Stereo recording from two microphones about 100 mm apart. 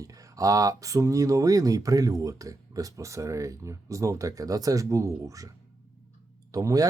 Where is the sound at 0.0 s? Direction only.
35° right (ahead or behind).